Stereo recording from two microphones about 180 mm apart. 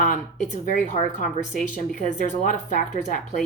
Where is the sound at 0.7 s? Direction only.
45° left (ahead or behind).